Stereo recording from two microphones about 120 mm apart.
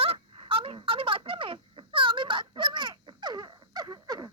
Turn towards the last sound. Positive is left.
turn(degrees=-35)  # may be behind; listen again after turning